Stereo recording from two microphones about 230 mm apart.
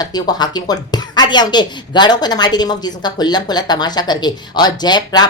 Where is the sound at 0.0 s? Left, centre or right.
Centre.